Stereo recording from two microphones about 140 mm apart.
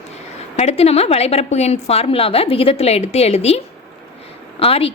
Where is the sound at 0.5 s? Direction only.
50° left (ahead or behind).